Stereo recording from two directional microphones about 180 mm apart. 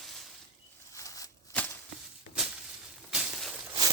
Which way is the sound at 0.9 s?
20° left (ahead or behind).